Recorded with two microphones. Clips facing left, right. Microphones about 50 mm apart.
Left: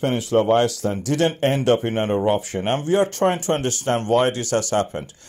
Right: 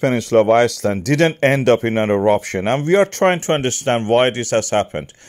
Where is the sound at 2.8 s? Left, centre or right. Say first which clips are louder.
Right 5 dB; right.